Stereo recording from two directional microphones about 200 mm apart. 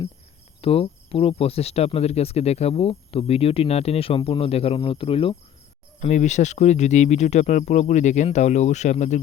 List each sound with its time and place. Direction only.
0.6 s speech: 30° left (ahead or behind)